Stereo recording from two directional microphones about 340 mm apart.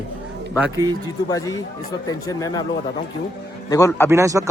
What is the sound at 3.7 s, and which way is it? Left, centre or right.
Speech, centre.